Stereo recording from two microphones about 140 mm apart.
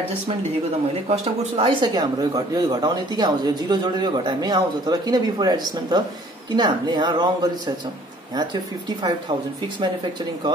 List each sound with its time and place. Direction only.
1.0 s speech: 45° right (ahead or behind); by 7.7 s 30° right (ahead or behind)